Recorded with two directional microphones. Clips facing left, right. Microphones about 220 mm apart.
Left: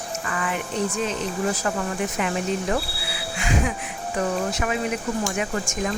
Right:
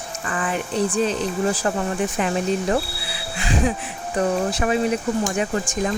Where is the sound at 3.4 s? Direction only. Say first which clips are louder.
Right 3 dB; 35° right (ahead or behind).